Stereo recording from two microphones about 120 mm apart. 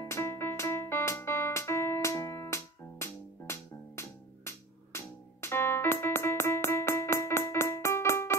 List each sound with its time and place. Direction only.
0.0 s music: 20° left (ahead or behind)